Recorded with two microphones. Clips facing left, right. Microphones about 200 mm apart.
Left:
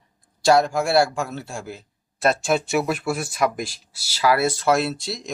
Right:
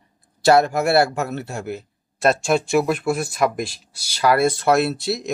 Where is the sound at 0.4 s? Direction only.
60° right (ahead or behind).